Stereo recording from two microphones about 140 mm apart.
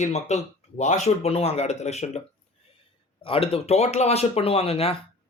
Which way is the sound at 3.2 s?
40° left (ahead or behind).